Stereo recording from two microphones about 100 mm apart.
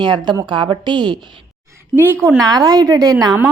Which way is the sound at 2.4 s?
40° right (ahead or behind).